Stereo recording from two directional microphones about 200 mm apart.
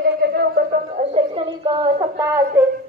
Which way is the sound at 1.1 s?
30° right (ahead or behind).